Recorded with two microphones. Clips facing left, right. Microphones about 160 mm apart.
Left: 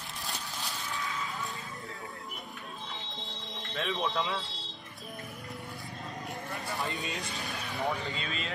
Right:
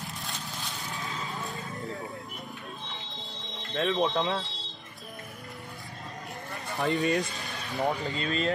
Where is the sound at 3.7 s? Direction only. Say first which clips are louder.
Right 6 dB; 40° right (ahead or behind).